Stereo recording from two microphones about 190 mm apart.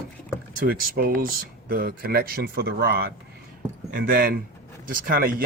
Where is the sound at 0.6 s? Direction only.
50° right (ahead or behind).